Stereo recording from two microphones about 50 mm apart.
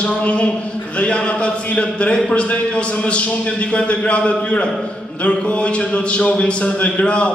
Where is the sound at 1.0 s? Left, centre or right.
Left.